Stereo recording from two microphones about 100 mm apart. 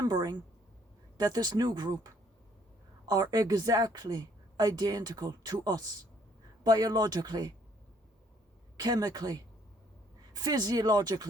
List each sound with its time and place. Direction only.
0.0 s speech: 40° right (ahead or behind)
3.1 s a woman's voice: 40° right (ahead or behind)
8.8 s a woman's voice: 40° right (ahead or behind)